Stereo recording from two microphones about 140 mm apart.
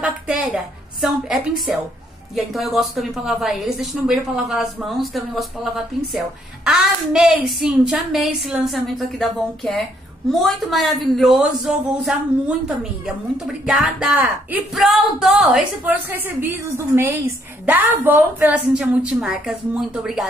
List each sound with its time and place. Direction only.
0.0 s a woman's voice: 5° right (ahead or behind)
16.1 s a woman's voice: 15° right (ahead or behind)